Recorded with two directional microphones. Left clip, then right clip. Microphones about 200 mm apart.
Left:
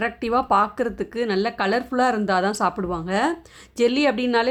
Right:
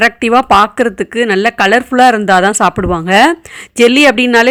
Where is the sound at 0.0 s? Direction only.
30° right (ahead or behind).